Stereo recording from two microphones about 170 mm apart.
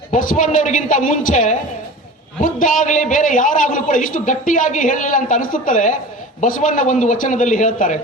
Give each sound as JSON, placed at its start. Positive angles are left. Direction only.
{"t": 0.1, "sound": "a man's voice", "side_deg": 50}